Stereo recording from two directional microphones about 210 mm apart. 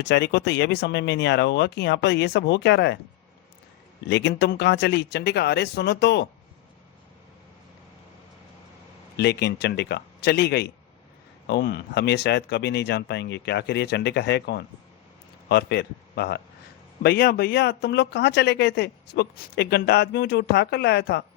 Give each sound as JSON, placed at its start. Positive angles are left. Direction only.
{"t": 0.0, "sound": "speech", "side_deg": 55}
{"t": 4.1, "sound": "speech", "side_deg": 55}
{"t": 9.1, "sound": "speech", "side_deg": 50}